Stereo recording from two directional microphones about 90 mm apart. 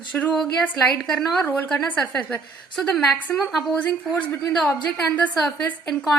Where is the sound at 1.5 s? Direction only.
20° left (ahead or behind).